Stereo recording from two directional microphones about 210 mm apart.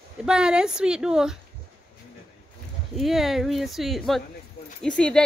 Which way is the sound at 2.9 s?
Centre (ahead or behind).